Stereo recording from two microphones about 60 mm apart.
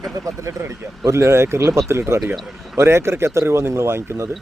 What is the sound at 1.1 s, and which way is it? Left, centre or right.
Speech, right.